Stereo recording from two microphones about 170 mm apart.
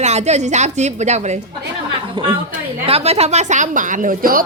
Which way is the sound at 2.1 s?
30° right (ahead or behind).